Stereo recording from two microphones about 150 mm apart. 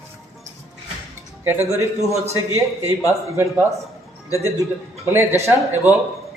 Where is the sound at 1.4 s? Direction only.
20° right (ahead or behind).